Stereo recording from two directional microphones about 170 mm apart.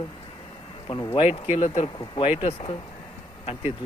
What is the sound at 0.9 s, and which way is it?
Speech, 30° left (ahead or behind).